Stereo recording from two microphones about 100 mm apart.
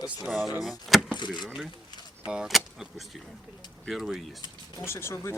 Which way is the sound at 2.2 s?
10° right (ahead or behind).